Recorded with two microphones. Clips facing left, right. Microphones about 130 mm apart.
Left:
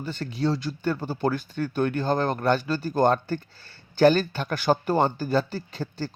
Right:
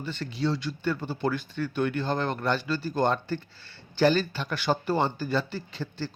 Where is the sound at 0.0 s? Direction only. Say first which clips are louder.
Left 3 dB; 40° left (ahead or behind).